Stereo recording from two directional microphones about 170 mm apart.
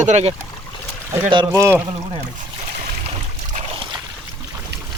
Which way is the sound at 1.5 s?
15° right (ahead or behind).